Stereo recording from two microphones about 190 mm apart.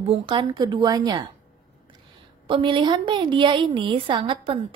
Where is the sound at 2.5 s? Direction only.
25° right (ahead or behind).